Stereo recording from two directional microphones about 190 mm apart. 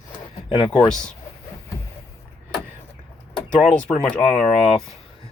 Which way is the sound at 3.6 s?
5° left (ahead or behind).